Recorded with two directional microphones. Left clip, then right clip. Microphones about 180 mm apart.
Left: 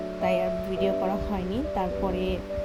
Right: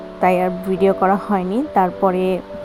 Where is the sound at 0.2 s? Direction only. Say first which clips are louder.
Right 9 dB; 20° right (ahead or behind).